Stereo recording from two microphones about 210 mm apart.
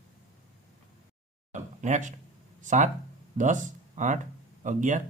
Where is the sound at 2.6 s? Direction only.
35° right (ahead or behind).